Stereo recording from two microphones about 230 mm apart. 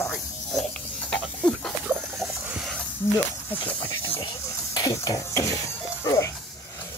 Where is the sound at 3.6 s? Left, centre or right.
Left.